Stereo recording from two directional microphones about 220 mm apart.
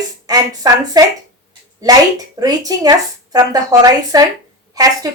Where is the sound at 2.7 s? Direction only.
15° right (ahead or behind).